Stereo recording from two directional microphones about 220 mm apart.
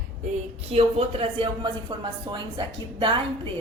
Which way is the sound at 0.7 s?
25° right (ahead or behind).